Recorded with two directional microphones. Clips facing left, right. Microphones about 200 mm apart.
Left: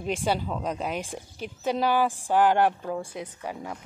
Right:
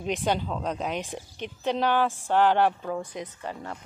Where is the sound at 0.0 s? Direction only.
5° left (ahead or behind).